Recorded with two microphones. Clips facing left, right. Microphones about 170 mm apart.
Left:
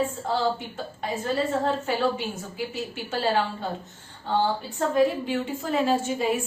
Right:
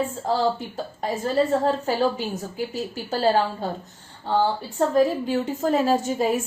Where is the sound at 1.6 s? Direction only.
35° right (ahead or behind).